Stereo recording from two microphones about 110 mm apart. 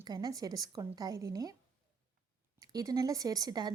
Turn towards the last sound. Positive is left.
turn(degrees=-40)  # may be behind; listen again after turning